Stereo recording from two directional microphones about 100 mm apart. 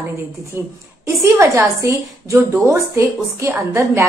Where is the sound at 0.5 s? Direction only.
25° right (ahead or behind).